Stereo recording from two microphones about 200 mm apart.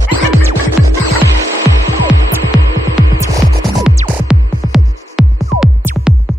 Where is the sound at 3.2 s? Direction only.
15° right (ahead or behind).